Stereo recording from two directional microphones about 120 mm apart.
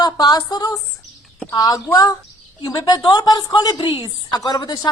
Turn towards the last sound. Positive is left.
turn(degrees=35)  # may be behind; listen again after turning